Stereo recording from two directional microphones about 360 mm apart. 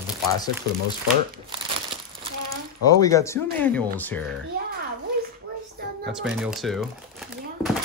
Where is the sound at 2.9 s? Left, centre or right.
Centre.